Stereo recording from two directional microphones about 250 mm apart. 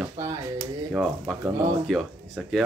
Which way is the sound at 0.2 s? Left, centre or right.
Centre.